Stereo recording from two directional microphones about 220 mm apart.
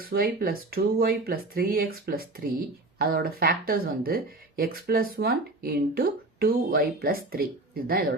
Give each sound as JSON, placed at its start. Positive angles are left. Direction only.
{"t": 0.0, "sound": "speech", "side_deg": -45}